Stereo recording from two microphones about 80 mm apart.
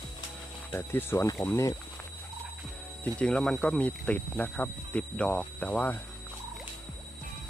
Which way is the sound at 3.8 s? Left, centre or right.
Centre.